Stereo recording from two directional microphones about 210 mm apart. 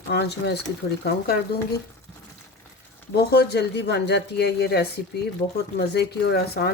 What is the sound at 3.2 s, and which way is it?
Speech, 50° left (ahead or behind).